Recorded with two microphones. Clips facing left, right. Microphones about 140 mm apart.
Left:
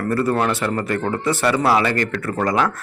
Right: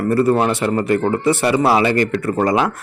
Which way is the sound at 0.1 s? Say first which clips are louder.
Right 4 dB; 15° right (ahead or behind).